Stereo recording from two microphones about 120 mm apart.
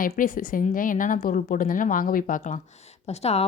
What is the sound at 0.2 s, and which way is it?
Speech, 90° left.